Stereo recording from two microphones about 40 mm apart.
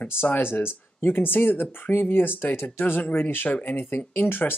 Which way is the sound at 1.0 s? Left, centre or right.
Left.